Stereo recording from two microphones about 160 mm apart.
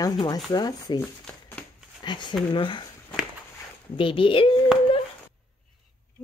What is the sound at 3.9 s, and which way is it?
Speech, 35° left (ahead or behind).